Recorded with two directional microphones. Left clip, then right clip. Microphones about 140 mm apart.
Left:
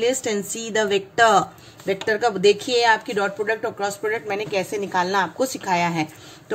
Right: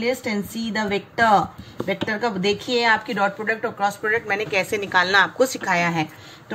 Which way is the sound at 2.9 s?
60° left (ahead or behind).